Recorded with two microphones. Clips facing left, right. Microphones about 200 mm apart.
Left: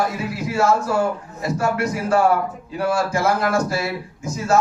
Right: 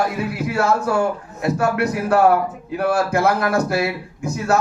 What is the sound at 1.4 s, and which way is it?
A man's voice, 60° right (ahead or behind).